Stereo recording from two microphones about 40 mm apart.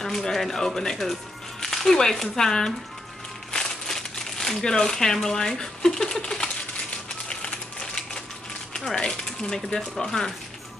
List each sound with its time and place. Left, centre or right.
0.0 s speech: centre
3.5 s crumpling: centre
8.7 s speech: centre